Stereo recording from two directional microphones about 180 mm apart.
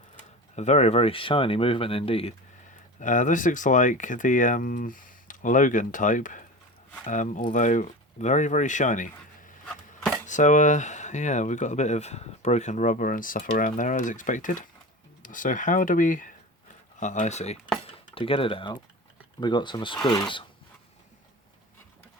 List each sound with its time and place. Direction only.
0.5 s speech: 40° left (ahead or behind)
3.0 s speech: 45° left (ahead or behind); by 20.0 s 25° left (ahead or behind)